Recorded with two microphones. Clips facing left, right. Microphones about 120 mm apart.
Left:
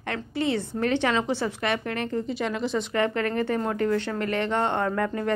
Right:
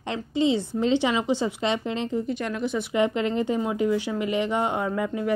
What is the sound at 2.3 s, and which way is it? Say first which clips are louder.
Speech: even; centre (ahead or behind).